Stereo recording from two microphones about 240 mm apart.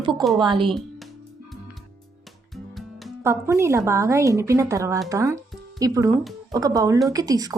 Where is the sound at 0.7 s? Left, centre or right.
Centre.